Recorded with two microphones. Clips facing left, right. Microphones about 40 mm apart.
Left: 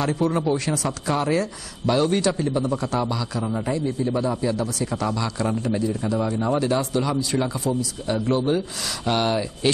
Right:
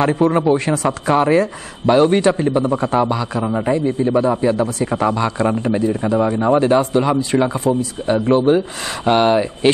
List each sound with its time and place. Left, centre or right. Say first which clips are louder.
0.0 s a man's voice: right 7 dB; right